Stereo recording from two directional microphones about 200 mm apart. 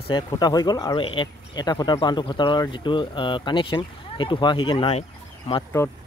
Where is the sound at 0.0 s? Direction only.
20° left (ahead or behind).